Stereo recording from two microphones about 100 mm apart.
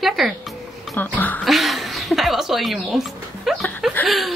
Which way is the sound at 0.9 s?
20° left (ahead or behind).